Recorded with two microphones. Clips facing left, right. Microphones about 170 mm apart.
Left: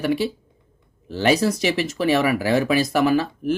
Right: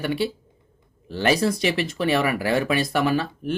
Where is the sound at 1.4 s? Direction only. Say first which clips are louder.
Left 1 dB; 5° left (ahead or behind).